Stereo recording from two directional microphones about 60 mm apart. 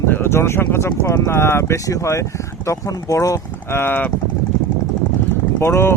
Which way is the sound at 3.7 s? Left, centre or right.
Left.